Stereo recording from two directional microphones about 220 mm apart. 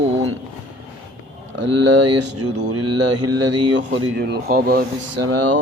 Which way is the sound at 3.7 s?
50° right (ahead or behind).